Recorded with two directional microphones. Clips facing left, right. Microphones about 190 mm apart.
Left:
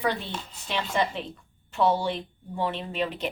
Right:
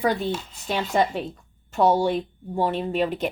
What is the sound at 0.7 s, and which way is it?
Speech, 45° right (ahead or behind).